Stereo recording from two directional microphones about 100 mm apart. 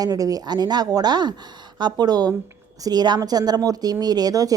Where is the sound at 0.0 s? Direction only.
40° right (ahead or behind).